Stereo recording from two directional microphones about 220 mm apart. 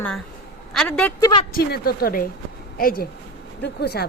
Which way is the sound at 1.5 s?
45° left (ahead or behind).